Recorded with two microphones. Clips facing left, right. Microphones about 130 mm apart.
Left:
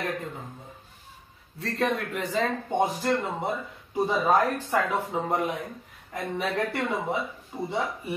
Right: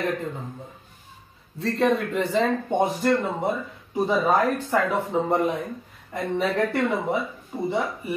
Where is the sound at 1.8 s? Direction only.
30° right (ahead or behind).